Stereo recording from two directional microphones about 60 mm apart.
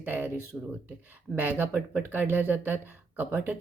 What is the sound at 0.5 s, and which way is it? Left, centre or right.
Speech, right.